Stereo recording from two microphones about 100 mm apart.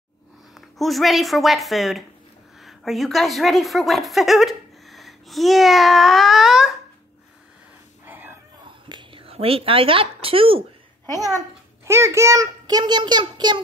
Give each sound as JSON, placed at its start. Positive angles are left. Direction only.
{"t": 0.6, "sound": "a woman's voice", "side_deg": 0}
{"t": 8.0, "sound": "a sound", "side_deg": -20}
{"t": 8.6, "sound": "speech", "side_deg": -50}
{"t": 11.3, "sound": "a child's voice", "side_deg": -30}